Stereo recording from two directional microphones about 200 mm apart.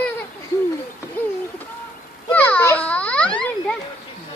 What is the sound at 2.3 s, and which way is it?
A child's voice, 5° left (ahead or behind).